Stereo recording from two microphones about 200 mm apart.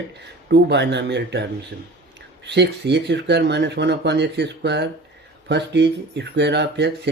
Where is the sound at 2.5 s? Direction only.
60° right (ahead or behind).